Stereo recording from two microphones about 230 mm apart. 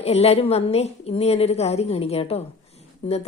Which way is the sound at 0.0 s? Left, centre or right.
Left.